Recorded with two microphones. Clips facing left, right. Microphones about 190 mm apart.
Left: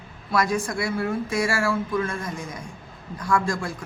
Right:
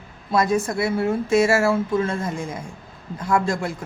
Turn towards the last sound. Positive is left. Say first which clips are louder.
# right 3 dB
turn(degrees=-25)  # may be behind; listen again after turning